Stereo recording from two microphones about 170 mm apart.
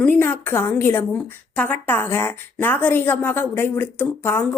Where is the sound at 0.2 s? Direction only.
15° left (ahead or behind).